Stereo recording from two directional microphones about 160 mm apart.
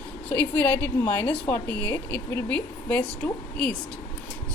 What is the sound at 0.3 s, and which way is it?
A woman's voice, 10° left (ahead or behind).